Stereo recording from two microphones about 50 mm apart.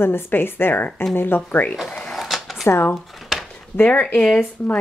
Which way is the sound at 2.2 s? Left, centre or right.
Centre.